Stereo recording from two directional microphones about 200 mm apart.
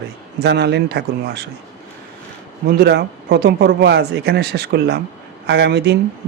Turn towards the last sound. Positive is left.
turn(degrees=-55)  # may be behind; listen again after turning